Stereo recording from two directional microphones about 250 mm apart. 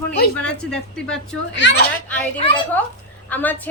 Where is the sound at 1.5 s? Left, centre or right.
Left.